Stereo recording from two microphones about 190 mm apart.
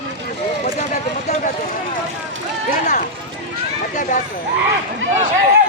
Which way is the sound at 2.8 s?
45° left (ahead or behind).